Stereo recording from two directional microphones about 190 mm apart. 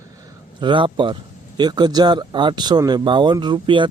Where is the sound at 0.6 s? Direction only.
25° right (ahead or behind).